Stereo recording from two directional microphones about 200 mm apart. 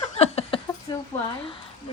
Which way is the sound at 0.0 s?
30° left (ahead or behind).